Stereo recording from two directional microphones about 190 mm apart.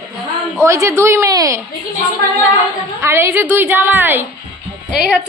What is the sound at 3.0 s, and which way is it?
A woman's voice, 15° right (ahead or behind).